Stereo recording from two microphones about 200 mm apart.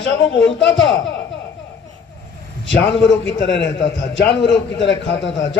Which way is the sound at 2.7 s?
65° left (ahead or behind).